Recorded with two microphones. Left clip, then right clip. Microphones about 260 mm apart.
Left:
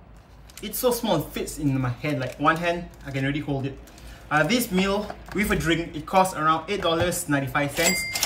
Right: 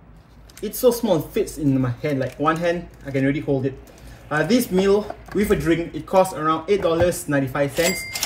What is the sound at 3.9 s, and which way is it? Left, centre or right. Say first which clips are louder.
Speech: left 1 dB; centre.